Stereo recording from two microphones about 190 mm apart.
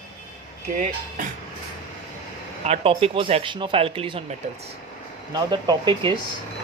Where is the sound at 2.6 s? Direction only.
30° right (ahead or behind).